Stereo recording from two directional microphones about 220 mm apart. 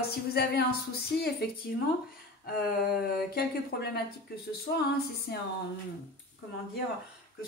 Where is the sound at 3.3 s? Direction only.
45° left (ahead or behind).